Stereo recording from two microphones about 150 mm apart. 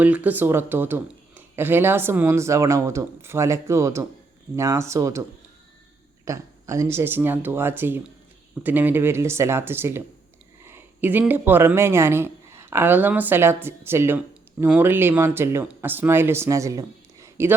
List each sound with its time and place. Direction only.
0.0 s speech: 10° right (ahead or behind)
6.2 s speech: 20° right (ahead or behind)